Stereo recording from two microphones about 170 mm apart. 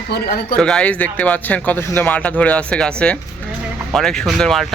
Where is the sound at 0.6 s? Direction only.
5° left (ahead or behind).